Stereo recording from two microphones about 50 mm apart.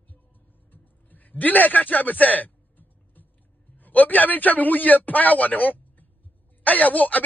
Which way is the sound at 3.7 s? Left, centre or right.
Left.